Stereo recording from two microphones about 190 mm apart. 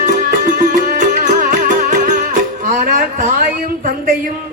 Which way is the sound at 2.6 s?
40° right (ahead or behind).